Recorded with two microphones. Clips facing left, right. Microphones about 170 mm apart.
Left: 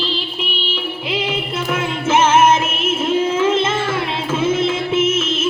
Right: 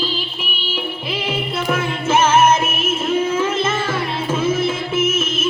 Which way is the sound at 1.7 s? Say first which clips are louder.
Left 1 dB; 20° left (ahead or behind).